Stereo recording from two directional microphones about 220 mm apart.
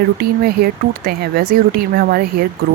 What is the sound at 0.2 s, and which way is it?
Speech, 45° right (ahead or behind).